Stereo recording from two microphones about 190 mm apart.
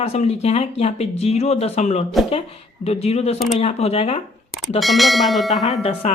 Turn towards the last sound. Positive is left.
turn(degrees=35)  # may be behind; listen again after turning